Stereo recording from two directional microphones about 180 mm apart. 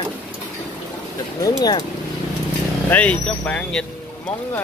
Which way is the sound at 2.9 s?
10° left (ahead or behind).